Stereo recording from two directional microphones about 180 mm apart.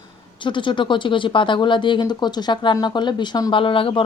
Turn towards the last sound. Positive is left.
turn(degrees=30)  # may be behind; listen again after turning